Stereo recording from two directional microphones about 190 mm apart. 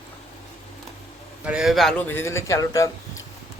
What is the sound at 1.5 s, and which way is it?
Speech, 5° right (ahead or behind).